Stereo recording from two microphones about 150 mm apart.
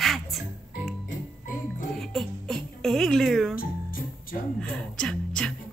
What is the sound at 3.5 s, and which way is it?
Music, 70° left (ahead or behind).